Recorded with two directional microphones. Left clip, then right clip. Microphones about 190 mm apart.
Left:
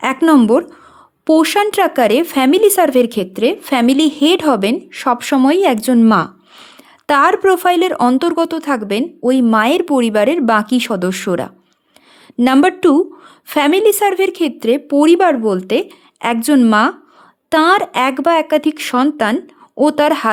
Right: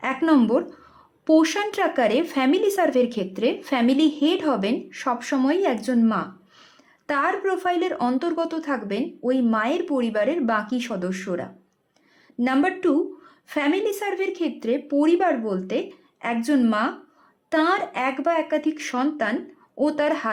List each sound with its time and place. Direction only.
0.0 s speech: 45° left (ahead or behind)